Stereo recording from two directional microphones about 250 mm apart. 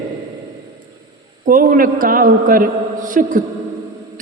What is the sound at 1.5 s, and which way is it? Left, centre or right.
A man's voice, right.